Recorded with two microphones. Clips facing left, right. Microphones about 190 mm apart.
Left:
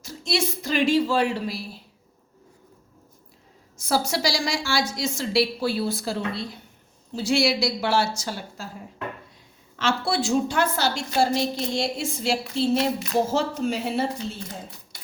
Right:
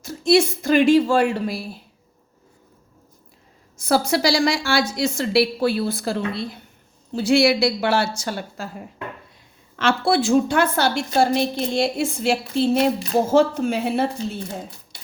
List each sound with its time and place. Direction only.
0.0 s a woman's voice: 50° right (ahead or behind)
3.8 s a woman's voice: 60° right (ahead or behind)
9.7 s a woman's voice: 55° right (ahead or behind)